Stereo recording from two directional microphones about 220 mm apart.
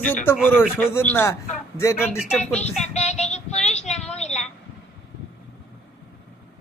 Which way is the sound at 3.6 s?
30° left (ahead or behind).